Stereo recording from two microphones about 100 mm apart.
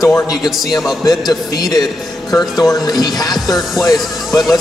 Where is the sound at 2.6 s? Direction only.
40° left (ahead or behind).